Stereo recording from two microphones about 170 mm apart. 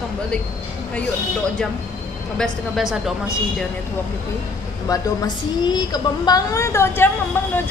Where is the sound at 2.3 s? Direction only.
Centre (ahead or behind).